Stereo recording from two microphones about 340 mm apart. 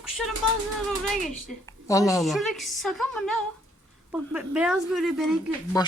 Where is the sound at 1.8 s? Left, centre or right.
Centre.